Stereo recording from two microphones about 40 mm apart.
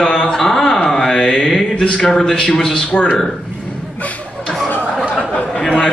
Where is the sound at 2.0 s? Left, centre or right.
Centre.